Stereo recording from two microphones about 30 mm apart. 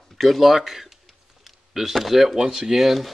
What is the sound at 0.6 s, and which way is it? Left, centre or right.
Speech, centre.